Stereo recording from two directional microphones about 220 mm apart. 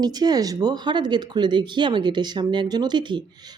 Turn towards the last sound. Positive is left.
turn(degrees=-20)  # may be behind; listen again after turning